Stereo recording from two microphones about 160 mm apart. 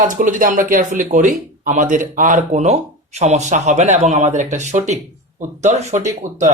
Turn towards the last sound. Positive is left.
turn(degrees=-50)  # may be behind; listen again after turning